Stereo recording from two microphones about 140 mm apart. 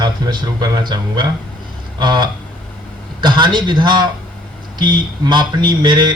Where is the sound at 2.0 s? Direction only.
30° right (ahead or behind).